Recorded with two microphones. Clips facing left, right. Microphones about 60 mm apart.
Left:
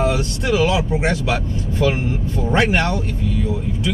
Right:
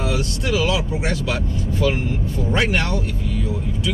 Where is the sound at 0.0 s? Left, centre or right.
Left.